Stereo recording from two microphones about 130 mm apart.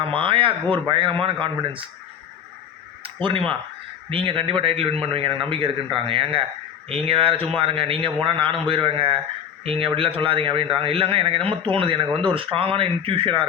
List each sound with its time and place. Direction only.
0.0 s speech: 40° right (ahead or behind)
3.0 s a sound: 40° right (ahead or behind)
4.1 s speech: 45° right (ahead or behind)